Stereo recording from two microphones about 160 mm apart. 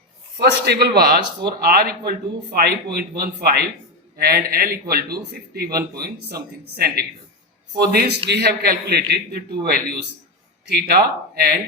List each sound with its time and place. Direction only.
0.3 s a man's voice: 90° right